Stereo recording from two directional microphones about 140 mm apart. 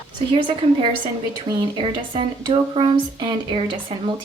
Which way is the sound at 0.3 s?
35° right (ahead or behind).